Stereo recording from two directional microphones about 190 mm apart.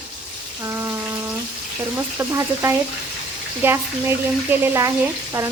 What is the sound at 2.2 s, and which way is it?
Speech, 15° right (ahead or behind).